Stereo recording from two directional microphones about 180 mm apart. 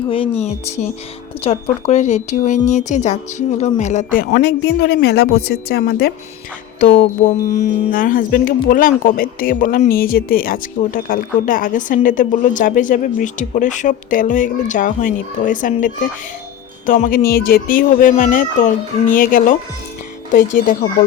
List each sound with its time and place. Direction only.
0.1 s speech: 35° left (ahead or behind); by 6.1 s 60° left (ahead or behind)
6.7 s music: 50° left (ahead or behind)
7.5 s speech: 45° left (ahead or behind)
16.8 s speech: 50° left (ahead or behind)